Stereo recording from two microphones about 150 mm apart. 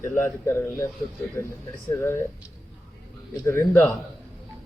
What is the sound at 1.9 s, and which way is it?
Speech, 15° left (ahead or behind).